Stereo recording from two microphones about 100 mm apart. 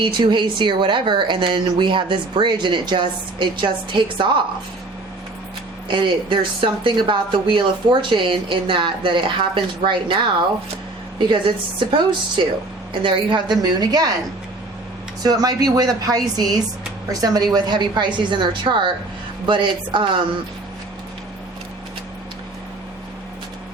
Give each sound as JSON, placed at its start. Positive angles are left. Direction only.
{"t": 0.0, "sound": "speech", "side_deg": -50}
{"t": 5.9, "sound": "speech", "side_deg": -55}
{"t": 15.2, "sound": "speech", "side_deg": -40}